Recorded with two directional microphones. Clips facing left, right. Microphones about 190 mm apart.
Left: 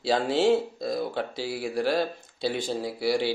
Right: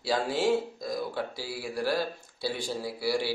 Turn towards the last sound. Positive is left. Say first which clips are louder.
# left 4 dB
turn(degrees=20)  # may be behind; listen again after turning